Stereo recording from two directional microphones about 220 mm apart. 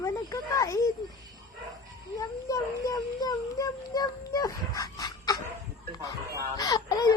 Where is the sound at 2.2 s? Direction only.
15° left (ahead or behind).